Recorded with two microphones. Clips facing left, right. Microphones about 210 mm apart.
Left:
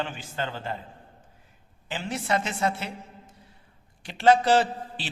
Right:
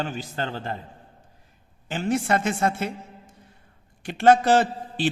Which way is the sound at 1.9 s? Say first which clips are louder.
Right 5 dB; 50° right (ahead or behind).